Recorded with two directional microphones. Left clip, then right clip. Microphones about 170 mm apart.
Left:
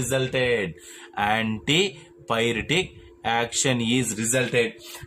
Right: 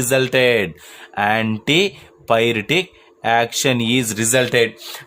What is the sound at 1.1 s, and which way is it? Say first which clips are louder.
Speech: right 6 dB; 40° right (ahead or behind).